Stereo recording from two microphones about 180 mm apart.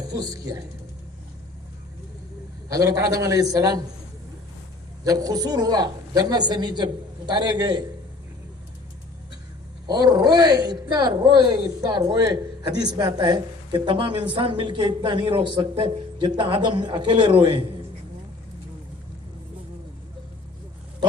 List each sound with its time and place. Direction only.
0.1 s speech: 20° right (ahead or behind)
2.7 s speech: 20° right (ahead or behind)
5.0 s speech: 20° right (ahead or behind)
9.8 s speech: 20° right (ahead or behind)